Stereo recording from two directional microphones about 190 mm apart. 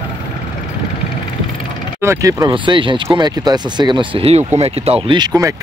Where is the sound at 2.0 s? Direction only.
15° right (ahead or behind).